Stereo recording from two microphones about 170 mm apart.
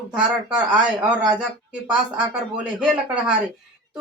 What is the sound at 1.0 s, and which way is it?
Speech, 10° right (ahead or behind).